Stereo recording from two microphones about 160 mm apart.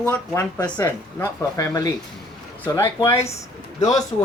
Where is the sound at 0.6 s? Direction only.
20° left (ahead or behind).